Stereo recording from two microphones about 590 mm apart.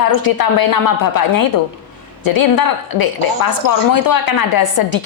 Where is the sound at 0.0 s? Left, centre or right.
Left.